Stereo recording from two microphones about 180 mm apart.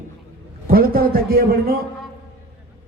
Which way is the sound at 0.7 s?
55° right (ahead or behind).